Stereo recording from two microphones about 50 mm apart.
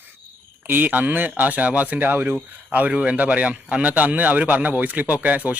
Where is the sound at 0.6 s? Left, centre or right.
Right.